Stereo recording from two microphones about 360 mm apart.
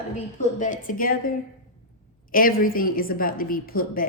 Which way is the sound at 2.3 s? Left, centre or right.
Left.